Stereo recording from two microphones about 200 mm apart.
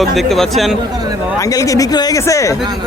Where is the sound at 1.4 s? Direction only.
15° left (ahead or behind).